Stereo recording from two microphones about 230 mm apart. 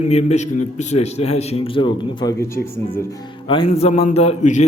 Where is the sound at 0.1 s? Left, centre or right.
Left.